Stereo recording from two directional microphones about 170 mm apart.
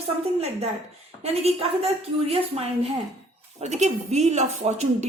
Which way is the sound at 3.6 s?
40° right (ahead or behind).